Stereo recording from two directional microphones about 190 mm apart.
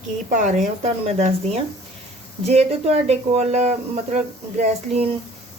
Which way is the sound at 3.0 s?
35° right (ahead or behind).